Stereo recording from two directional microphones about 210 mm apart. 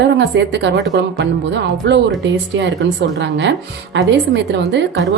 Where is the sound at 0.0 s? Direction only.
55° right (ahead or behind).